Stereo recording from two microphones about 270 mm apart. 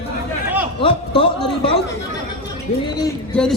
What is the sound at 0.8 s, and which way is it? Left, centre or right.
A man's voice, centre.